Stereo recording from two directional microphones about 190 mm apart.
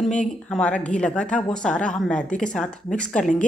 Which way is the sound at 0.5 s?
5° left (ahead or behind).